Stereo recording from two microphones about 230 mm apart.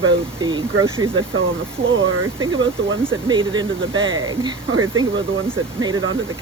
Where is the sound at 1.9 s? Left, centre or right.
Right.